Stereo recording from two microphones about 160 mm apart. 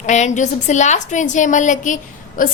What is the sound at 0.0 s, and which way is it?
A woman's voice, 45° left (ahead or behind).